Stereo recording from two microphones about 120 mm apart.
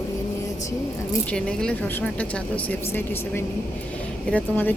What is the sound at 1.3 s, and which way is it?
A woman's voice, 5° left (ahead or behind).